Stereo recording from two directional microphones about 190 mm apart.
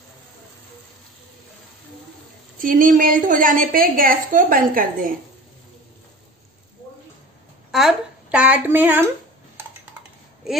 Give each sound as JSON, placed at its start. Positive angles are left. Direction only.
{"t": 2.6, "sound": "a woman's voice", "side_deg": -45}
{"t": 7.7, "sound": "speech", "side_deg": -5}